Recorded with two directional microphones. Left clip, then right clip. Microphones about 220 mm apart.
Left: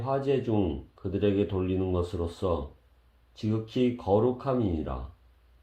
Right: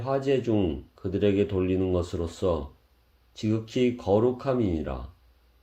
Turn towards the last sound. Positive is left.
turn(degrees=-30)  # may be behind; listen again after turning